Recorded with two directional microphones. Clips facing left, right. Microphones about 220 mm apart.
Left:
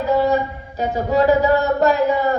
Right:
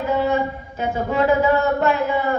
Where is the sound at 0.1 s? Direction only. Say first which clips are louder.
Left 3 dB; 35° left (ahead or behind).